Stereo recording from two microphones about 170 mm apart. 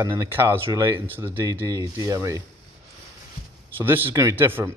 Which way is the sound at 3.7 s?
10° right (ahead or behind).